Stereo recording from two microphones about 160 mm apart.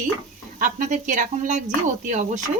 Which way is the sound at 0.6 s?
50° right (ahead or behind).